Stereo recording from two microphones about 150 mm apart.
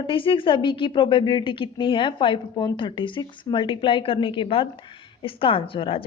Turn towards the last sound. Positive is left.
turn(degrees=35)  # may be behind; listen again after turning